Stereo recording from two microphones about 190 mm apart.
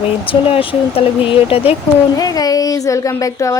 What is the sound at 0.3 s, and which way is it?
Speech, 30° left (ahead or behind).